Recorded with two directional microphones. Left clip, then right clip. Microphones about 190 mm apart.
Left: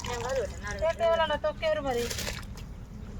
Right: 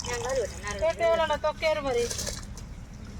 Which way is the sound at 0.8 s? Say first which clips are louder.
Right 1 dB; 40° right (ahead or behind).